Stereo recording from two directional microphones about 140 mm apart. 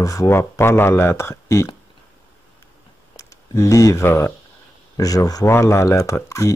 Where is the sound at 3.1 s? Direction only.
20° left (ahead or behind).